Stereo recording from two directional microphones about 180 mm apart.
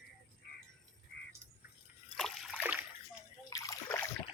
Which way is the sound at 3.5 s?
20° left (ahead or behind).